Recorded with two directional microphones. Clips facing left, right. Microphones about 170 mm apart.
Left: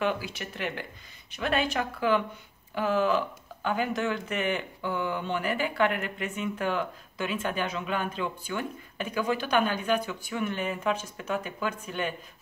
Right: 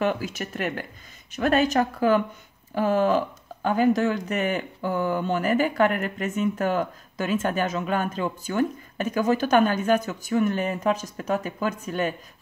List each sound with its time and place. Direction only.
0.0 s speech: 45° right (ahead or behind)